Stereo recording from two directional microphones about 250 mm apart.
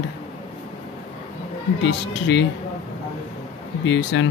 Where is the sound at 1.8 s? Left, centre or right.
Left.